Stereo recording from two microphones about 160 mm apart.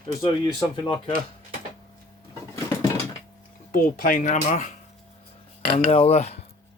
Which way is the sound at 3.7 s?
60° left (ahead or behind).